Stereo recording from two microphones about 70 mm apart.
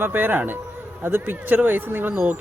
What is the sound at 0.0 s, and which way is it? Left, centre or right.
Speech, right.